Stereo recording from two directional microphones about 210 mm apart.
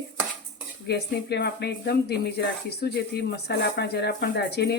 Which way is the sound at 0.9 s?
50° left (ahead or behind).